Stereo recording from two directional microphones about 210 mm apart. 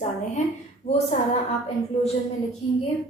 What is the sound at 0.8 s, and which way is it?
Speech, 30° left (ahead or behind).